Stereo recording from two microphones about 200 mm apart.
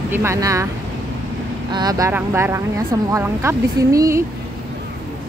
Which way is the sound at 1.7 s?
20° right (ahead or behind).